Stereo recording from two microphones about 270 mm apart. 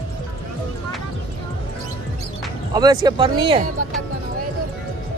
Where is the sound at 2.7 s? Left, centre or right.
Centre.